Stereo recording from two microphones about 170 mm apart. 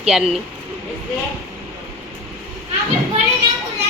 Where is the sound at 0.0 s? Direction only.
Centre (ahead or behind).